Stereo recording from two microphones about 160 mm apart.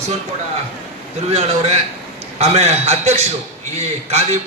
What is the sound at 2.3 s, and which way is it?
A man's voice, 40° right (ahead or behind).